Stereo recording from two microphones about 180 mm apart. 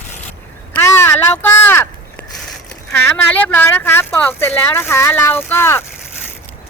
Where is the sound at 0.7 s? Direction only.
15° left (ahead or behind).